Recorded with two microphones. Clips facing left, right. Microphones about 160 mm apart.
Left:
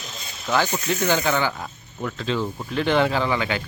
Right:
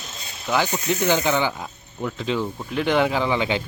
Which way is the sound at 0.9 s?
15° right (ahead or behind).